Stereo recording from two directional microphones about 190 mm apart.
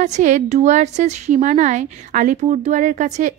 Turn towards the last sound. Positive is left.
turn(degrees=-40)  # may be behind; listen again after turning